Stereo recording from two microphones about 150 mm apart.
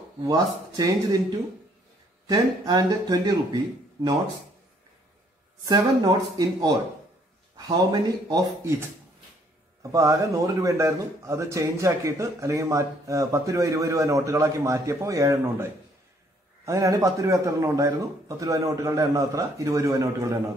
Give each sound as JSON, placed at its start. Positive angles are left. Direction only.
{"t": 0.2, "sound": "speech", "side_deg": -25}
{"t": 2.2, "sound": "speech", "side_deg": -25}
{"t": 5.7, "sound": "speech", "side_deg": -25}
{"t": 9.8, "sound": "speech", "side_deg": -20}